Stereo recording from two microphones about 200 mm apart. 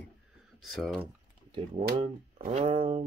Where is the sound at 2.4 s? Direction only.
35° right (ahead or behind).